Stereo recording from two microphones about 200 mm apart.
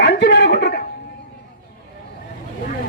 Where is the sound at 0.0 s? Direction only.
55° left (ahead or behind).